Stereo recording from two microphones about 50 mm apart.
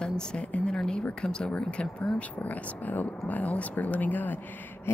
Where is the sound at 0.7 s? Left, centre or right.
Centre.